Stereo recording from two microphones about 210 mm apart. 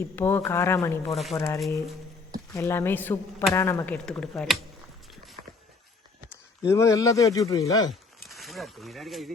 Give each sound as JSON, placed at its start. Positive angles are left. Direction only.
{"t": 0.2, "sound": "a woman's voice", "side_deg": 10}
{"t": 1.1, "sound": "speech", "side_deg": 0}
{"t": 1.4, "sound": "a woman's voice", "side_deg": 15}
{"t": 5.4, "sound": "walk", "side_deg": -30}
{"t": 6.7, "sound": "a woman's voice", "side_deg": 15}
{"t": 7.9, "sound": "speech", "side_deg": 0}